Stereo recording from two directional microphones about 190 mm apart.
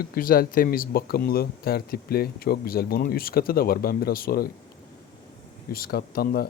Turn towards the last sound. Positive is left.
turn(degrees=55)  # may be behind; listen again after turning